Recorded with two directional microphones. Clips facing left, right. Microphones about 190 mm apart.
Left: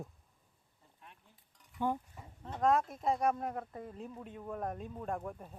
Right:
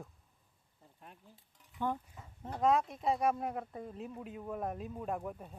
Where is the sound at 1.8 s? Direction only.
15° left (ahead or behind).